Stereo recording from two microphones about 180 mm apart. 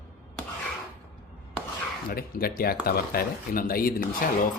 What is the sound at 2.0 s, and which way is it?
Speech, 55° left (ahead or behind).